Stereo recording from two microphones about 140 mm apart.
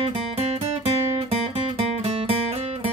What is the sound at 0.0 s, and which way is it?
Music, 45° right (ahead or behind).